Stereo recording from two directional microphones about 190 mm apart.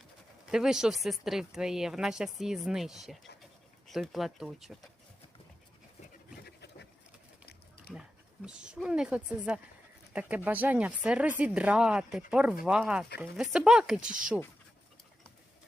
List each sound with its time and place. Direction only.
0.5 s speech: 5° right (ahead or behind)
6.4 s a sound: 60° left (ahead or behind)
7.9 s speech: 5° right (ahead or behind)